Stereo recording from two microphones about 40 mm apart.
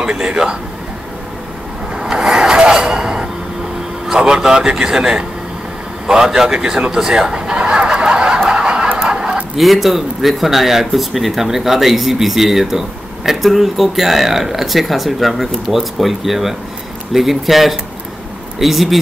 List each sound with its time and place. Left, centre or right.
0.0 s speech: right
2.0 s a sound: centre
4.1 s a man's voice: centre
8.5 s snicker: centre
9.1 s a sound: centre
9.6 s speech: centre